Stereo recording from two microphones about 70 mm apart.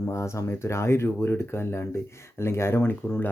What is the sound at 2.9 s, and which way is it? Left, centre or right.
Speech, left.